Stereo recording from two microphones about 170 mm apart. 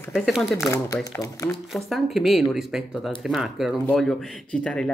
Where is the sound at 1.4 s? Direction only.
Centre (ahead or behind).